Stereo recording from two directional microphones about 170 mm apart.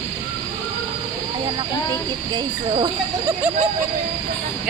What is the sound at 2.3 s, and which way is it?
Speech, 25° right (ahead or behind).